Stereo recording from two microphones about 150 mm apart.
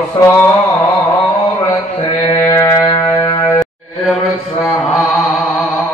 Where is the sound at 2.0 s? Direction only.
20° left (ahead or behind).